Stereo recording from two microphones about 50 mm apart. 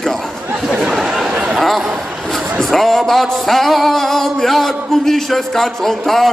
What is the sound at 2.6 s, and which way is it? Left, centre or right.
A man's voice, centre.